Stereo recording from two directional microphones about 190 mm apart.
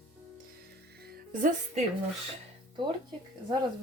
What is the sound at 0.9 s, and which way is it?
Music, 55° right (ahead or behind).